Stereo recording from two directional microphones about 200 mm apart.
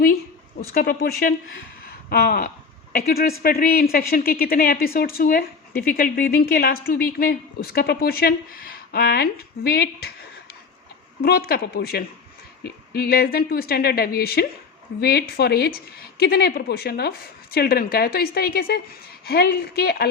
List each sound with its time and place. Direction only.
0.7 s speech: 50° left (ahead or behind)
1.8 s a sound: 50° left (ahead or behind)
2.9 s speech: 50° left (ahead or behind)
11.2 s speech: 50° left (ahead or behind)